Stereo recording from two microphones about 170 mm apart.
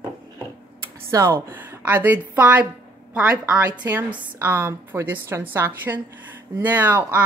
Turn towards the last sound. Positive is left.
turn(degrees=-10)  # may be behind; listen again after turning